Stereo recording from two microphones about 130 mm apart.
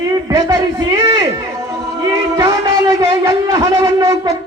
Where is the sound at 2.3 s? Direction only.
25° right (ahead or behind).